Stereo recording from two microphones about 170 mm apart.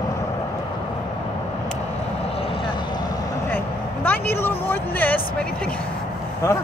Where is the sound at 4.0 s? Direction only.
10° left (ahead or behind).